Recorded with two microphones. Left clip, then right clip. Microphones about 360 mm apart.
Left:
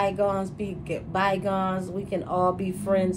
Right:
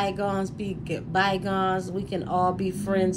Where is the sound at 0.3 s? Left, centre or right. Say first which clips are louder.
Left 1 dB; centre.